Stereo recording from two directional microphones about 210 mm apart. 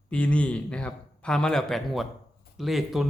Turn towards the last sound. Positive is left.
turn(degrees=0)  # may be behind; listen again after turning